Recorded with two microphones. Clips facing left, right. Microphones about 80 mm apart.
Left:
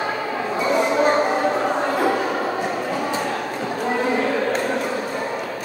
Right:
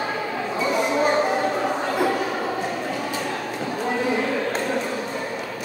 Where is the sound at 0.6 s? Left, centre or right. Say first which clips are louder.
Left 3 dB; centre.